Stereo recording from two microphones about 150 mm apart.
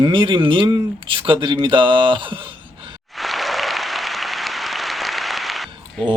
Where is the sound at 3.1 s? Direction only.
Centre (ahead or behind).